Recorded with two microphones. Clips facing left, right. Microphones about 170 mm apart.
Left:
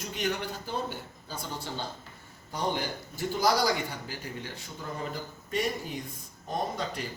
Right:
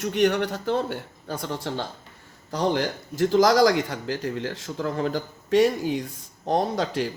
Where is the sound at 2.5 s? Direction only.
80° right.